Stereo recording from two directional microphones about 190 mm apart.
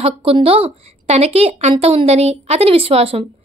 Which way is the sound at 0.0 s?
30° right (ahead or behind).